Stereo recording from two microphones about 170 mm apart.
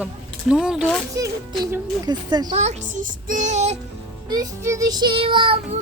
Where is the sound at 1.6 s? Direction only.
10° right (ahead or behind).